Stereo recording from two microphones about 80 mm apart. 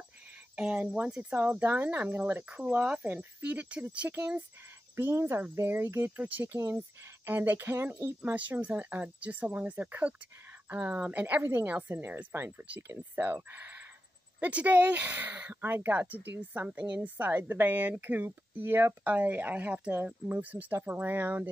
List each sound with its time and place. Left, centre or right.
0.6 s speech: centre
1.3 s speech: right
4.9 s speech: right